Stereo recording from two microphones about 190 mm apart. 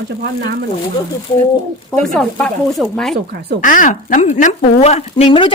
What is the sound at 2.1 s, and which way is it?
Speech, centre (ahead or behind).